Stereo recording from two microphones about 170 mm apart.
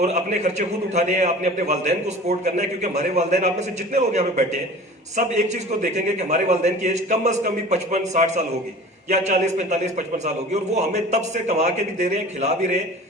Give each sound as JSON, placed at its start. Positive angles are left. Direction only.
{"t": 0.0, "sound": "a man's voice", "side_deg": -40}
{"t": 5.8, "sound": "a man's voice", "side_deg": -40}